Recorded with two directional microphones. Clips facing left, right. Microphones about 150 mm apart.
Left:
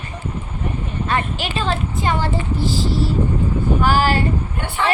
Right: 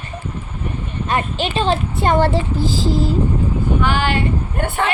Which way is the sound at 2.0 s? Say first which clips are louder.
Right 7 dB; 60° right (ahead or behind).